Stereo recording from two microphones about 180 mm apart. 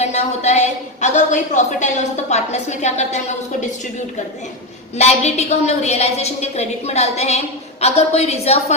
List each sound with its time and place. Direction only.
0.0 s a woman's voice: 40° left (ahead or behind)
4.9 s a woman's voice: 40° left (ahead or behind)